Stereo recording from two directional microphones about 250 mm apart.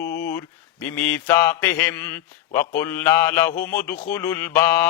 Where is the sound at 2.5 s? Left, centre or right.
Left.